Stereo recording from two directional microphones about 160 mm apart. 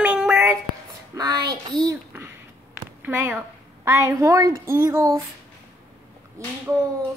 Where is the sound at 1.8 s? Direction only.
20° right (ahead or behind).